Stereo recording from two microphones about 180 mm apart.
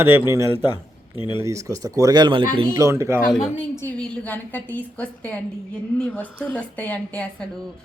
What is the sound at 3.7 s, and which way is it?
A woman's voice, 10° left (ahead or behind).